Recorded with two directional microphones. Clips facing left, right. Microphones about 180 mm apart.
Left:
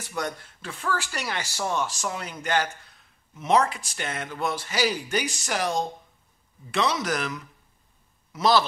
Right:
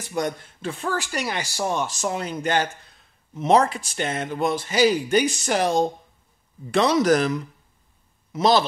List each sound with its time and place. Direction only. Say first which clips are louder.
0.1 s speech: right 5 dB; 20° right (ahead or behind)
6.7 s speech: right 8 dB; 40° right (ahead or behind)
8.3 s speech: right 3 dB; 20° right (ahead or behind)